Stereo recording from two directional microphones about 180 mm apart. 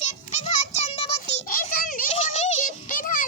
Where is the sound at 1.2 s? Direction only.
50° left (ahead or behind).